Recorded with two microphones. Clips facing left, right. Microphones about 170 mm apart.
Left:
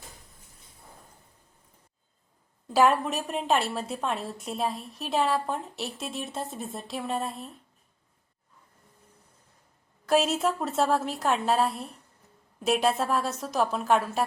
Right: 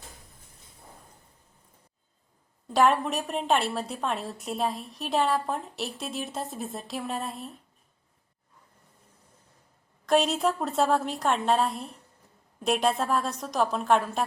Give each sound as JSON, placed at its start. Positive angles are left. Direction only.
{"t": 2.7, "sound": "a woman's voice", "side_deg": 0}
{"t": 10.1, "sound": "a woman's voice", "side_deg": 0}